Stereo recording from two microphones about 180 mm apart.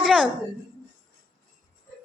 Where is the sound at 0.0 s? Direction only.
5° right (ahead or behind).